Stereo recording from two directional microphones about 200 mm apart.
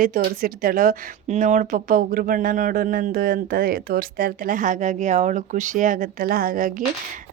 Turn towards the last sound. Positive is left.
turn(degrees=-45)  # may be behind; listen again after turning